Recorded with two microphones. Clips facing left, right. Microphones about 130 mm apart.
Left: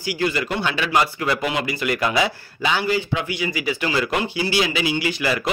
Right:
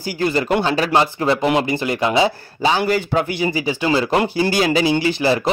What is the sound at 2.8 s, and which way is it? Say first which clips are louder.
Speech: right 4 dB; 45° right (ahead or behind).